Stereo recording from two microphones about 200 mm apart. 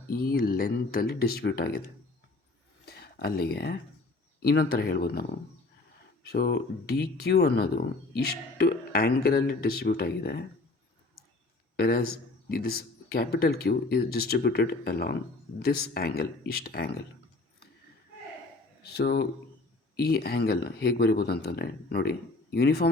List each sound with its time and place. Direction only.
0.1 s speech: 50° left (ahead or behind)
2.8 s a sound: 50° left (ahead or behind)
4.4 s speech: 50° left (ahead or behind)
6.2 s speech: 55° left (ahead or behind)
11.8 s speech: 50° left (ahead or behind)
18.8 s speech: 55° left (ahead or behind)